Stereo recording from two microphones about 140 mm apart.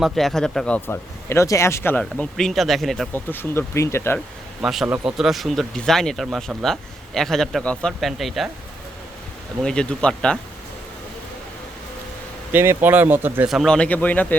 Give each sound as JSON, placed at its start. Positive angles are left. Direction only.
{"t": 0.0, "sound": "speech", "side_deg": 0}
{"t": 3.1, "sound": "speech", "side_deg": 15}
{"t": 4.6, "sound": "speech", "side_deg": 0}
{"t": 9.6, "sound": "speech", "side_deg": 5}
{"t": 12.5, "sound": "speech", "side_deg": -15}
{"t": 13.5, "sound": "speech", "side_deg": 0}